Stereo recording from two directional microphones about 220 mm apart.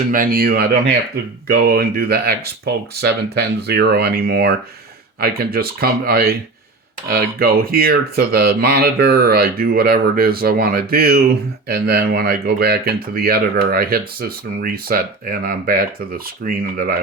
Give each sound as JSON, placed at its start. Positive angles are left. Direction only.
{"t": 0.1, "sound": "speech", "side_deg": -40}